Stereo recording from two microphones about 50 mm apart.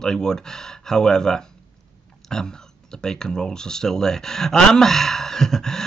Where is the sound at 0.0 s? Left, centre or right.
Centre.